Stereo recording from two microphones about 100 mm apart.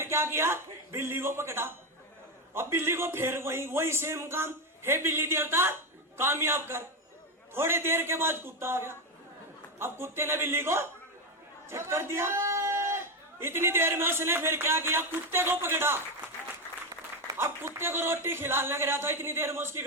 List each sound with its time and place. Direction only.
0.0 s a man's voice: 25° right (ahead or behind)
17.2 s speech: 25° right (ahead or behind)